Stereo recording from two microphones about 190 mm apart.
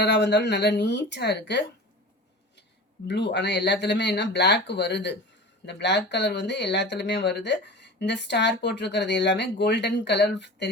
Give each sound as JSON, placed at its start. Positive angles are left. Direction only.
{"t": 0.0, "sound": "speech", "side_deg": 65}
{"t": 3.1, "sound": "speech", "side_deg": 65}